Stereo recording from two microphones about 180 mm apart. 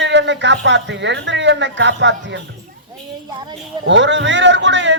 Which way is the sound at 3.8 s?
90° right.